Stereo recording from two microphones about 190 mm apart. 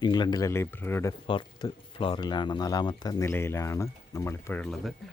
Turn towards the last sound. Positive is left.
turn(degrees=5)  # may be behind; listen again after turning